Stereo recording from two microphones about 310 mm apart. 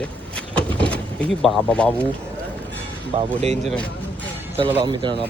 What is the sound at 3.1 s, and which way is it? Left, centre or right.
Speech, centre.